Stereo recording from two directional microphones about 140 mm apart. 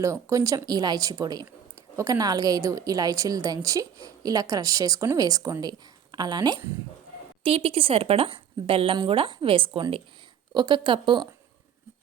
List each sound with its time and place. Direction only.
0.0 s speech: 20° right (ahead or behind)
7.4 s speech: 45° right (ahead or behind)